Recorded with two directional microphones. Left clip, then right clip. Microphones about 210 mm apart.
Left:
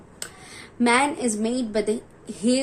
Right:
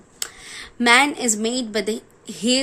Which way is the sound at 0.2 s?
35° right (ahead or behind).